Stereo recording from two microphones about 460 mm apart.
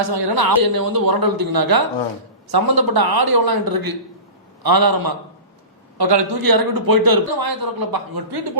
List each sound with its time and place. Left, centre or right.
0.1 s speech: right